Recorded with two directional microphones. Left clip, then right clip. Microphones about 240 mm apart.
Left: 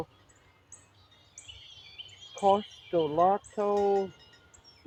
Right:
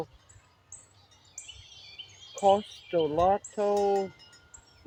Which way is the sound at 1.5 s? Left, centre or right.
Right.